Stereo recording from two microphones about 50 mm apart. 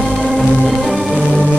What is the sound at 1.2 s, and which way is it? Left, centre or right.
Music, left.